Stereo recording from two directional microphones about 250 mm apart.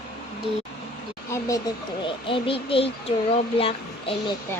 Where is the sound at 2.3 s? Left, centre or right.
Left.